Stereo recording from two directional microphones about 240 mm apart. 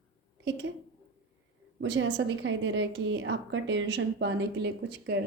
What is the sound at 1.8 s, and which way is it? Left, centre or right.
A woman's voice, right.